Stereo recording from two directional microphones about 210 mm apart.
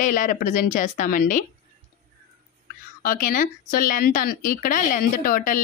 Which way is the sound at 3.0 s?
40° left (ahead or behind).